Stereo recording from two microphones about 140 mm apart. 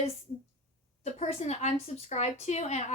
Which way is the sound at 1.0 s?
55° left (ahead or behind).